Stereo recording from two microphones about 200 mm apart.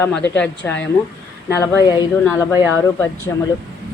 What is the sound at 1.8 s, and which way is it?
Speech, 20° left (ahead or behind).